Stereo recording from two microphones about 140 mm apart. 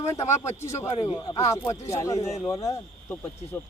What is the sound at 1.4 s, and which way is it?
A man's voice, 20° left (ahead or behind).